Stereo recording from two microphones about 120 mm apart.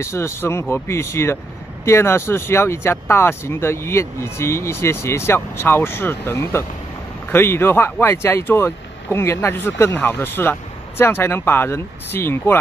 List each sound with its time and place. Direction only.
0.0 s speech: 25° left (ahead or behind)